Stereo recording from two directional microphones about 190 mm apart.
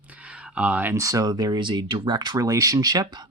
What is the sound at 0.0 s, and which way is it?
Speech, 5° right (ahead or behind).